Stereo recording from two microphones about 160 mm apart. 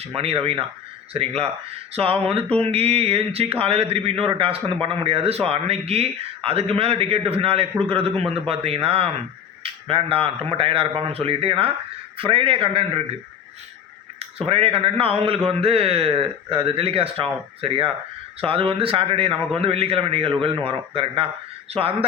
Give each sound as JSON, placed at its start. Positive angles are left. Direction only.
{"t": 0.2, "sound": "speech", "side_deg": -35}
{"t": 14.2, "sound": "speech", "side_deg": -35}